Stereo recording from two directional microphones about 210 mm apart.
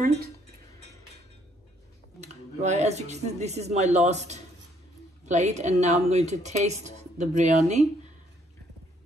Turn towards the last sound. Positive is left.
turn(degrees=-35)  # may be behind; listen again after turning